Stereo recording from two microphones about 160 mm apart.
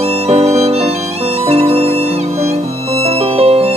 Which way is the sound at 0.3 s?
40° right (ahead or behind).